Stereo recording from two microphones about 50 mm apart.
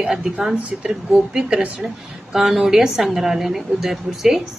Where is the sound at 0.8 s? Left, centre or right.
Centre.